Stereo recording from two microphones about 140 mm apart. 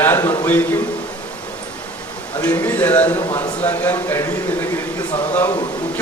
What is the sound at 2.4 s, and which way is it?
A man's voice, 10° left (ahead or behind).